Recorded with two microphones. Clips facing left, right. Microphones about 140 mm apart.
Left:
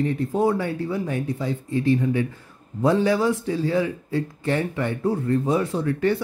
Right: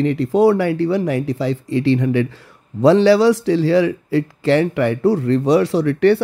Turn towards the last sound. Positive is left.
turn(degrees=-75)  # may be behind; listen again after turning